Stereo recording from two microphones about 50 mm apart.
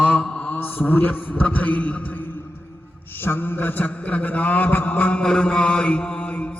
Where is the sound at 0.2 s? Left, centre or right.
Centre.